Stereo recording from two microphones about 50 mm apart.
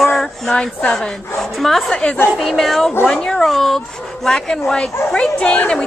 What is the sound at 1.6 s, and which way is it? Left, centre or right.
Speech, centre.